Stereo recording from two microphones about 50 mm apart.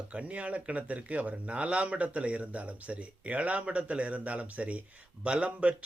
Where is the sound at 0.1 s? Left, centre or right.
Right.